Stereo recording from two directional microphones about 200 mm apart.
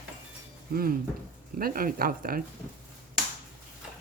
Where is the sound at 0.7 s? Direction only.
45° right (ahead or behind).